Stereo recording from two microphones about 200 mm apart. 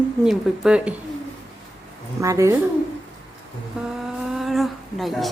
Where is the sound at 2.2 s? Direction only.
15° right (ahead or behind).